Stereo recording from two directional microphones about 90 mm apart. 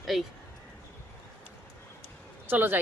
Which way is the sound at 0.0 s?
Centre (ahead or behind).